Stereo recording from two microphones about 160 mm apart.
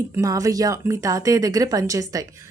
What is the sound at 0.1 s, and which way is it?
Speech, 20° right (ahead or behind).